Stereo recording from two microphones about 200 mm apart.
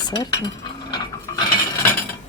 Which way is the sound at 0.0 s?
20° left (ahead or behind).